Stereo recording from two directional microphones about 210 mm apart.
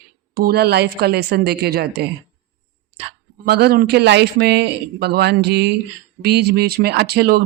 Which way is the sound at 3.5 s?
50° right (ahead or behind).